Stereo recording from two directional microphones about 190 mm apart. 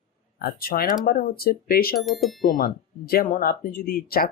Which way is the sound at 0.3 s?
50° left (ahead or behind).